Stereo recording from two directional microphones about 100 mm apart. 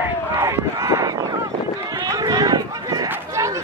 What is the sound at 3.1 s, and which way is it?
Chatter, 30° right (ahead or behind).